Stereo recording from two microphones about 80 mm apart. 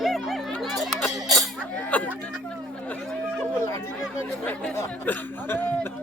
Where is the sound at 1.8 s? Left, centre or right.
Centre.